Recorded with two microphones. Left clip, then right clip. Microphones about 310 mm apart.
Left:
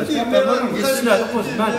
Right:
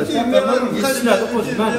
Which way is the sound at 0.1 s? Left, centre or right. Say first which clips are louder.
Even; right.